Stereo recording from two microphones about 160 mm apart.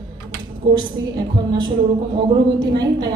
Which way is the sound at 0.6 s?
30° right (ahead or behind).